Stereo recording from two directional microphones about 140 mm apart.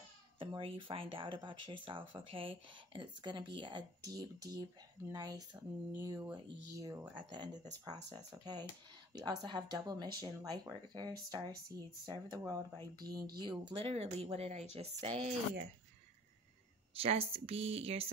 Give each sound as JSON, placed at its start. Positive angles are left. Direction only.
{"t": 0.4, "sound": "speech", "side_deg": -40}
{"t": 7.2, "sound": "speech", "side_deg": -35}
{"t": 16.9, "sound": "speech", "side_deg": -45}